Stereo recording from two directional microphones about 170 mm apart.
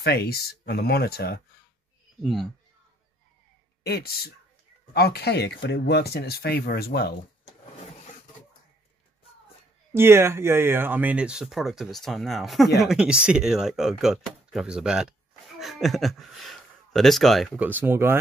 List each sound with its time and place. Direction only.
0.0 s speech: 70° left (ahead or behind)
2.2 s speech: centre (ahead or behind)
3.8 s speech: 70° left (ahead or behind)
9.9 s speech: 15° right (ahead or behind)
17.6 s speech: 10° right (ahead or behind)